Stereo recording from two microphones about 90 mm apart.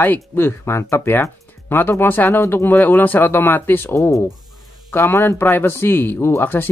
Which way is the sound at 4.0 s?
35° left (ahead or behind).